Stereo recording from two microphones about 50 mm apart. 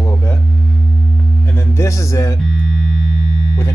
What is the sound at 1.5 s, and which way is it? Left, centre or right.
Music, left.